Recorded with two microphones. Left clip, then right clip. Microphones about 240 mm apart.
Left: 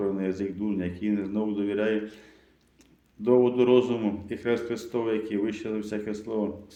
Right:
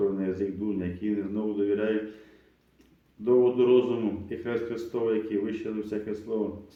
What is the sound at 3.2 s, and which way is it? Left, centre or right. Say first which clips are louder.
A man's voice: left 1 dB; left.